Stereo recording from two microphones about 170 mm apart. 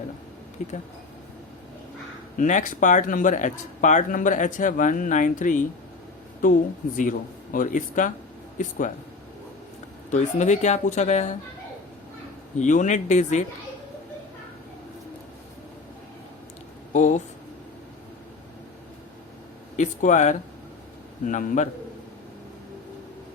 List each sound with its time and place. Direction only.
0.6 s speech: 45° left (ahead or behind)
2.4 s speech: 50° left (ahead or behind)
6.9 s speech: 50° left (ahead or behind)
10.1 s speech: 45° left (ahead or behind)
12.5 s speech: 45° left (ahead or behind)
16.9 s speech: 45° left (ahead or behind)
19.7 s speech: 45° left (ahead or behind)